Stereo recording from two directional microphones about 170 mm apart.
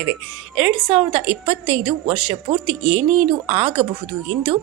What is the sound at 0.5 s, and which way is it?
Speech, 5° right (ahead or behind).